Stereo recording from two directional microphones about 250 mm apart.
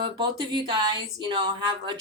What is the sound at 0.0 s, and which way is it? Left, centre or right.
A woman's voice, centre.